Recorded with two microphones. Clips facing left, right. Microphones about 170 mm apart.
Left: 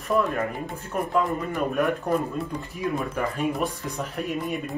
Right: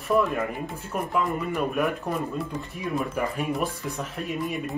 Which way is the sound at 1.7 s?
Centre (ahead or behind).